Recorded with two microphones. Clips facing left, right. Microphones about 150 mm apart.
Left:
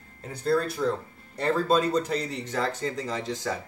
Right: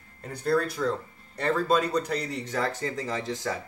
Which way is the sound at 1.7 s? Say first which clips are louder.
Left 2 dB; 30° left (ahead or behind).